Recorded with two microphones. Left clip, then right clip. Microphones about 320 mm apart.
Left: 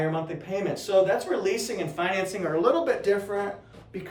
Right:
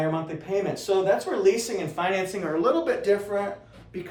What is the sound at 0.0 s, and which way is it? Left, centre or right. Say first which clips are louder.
Speech: right 1 dB; centre.